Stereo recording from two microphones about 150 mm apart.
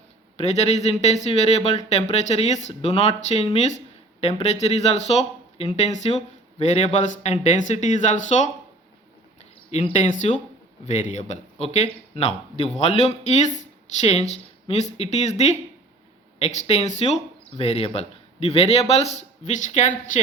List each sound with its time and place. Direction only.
0.3 s a man's voice: 45° left (ahead or behind)
19.5 s speech: 55° left (ahead or behind)